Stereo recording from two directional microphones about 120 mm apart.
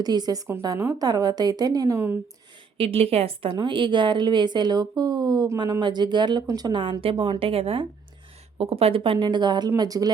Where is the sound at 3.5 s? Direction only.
40° right (ahead or behind).